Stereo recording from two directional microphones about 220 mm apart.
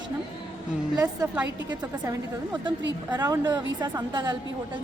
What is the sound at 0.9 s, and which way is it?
Speech, 10° right (ahead or behind).